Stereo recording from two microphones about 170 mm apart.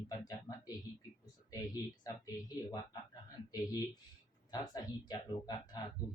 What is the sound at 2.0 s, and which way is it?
Speech, 20° left (ahead or behind).